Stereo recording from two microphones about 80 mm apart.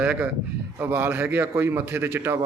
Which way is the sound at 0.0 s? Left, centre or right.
Centre.